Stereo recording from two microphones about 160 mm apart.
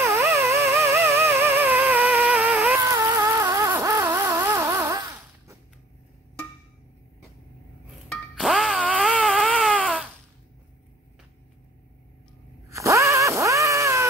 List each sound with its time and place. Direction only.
0.0 s music: 15° right (ahead or behind)
8.1 s music: centre (ahead or behind)
9.1 s baby cry: centre (ahead or behind)
12.6 s a sound: 20° right (ahead or behind)